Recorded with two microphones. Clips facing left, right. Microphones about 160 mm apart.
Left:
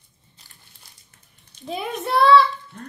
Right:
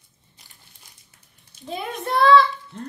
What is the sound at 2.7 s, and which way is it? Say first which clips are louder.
Speech: right 4 dB; 25° right (ahead or behind).